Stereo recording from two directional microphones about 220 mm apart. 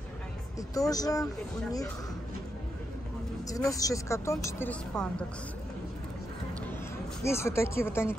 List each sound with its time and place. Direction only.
0.6 s speech: 15° left (ahead or behind)
3.4 s speech: 15° left (ahead or behind)
7.2 s speech: 10° left (ahead or behind)